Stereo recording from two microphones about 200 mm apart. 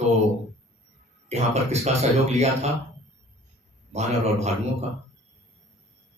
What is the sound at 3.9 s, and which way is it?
Speech, 35° right (ahead or behind).